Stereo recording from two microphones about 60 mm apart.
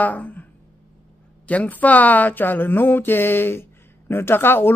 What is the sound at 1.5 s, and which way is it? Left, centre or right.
Speech, left.